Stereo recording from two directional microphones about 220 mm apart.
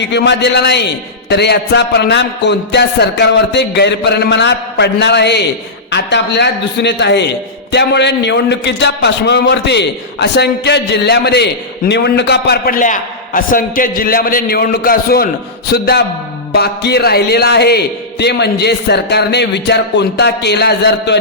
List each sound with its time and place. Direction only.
0.1 s a man's voice: 50° left (ahead or behind)